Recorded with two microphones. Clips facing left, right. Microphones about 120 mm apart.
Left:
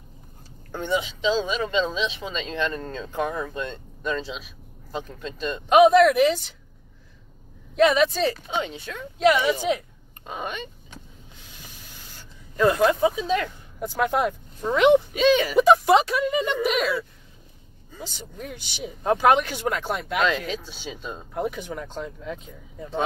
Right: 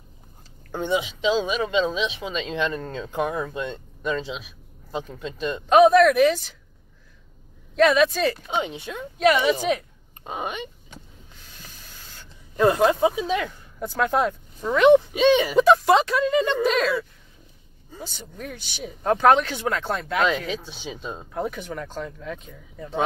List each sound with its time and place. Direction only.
0.7 s speech: 20° right (ahead or behind)
5.7 s speech: 15° left (ahead or behind)
7.7 s speech: 20° left (ahead or behind)
8.5 s speech: 20° right (ahead or behind)
9.6 s speech: 15° left (ahead or behind)
10.2 s speech: 15° right (ahead or behind)
12.5 s speech: 20° right (ahead or behind)
13.7 s speech: 15° left (ahead or behind)
15.1 s speech: 20° right (ahead or behind)
15.6 s speech: 15° left (ahead or behind)
18.0 s speech: 15° left (ahead or behind)
20.2 s speech: 10° right (ahead or behind)
21.3 s speech: 15° left (ahead or behind)